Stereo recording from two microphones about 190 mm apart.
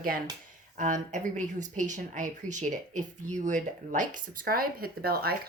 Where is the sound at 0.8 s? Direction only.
40° right (ahead or behind).